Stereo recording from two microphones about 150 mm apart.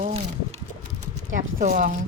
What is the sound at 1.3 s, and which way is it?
Speech, 60° right (ahead or behind).